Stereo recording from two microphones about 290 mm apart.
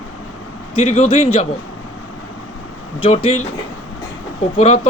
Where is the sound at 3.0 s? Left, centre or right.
Centre.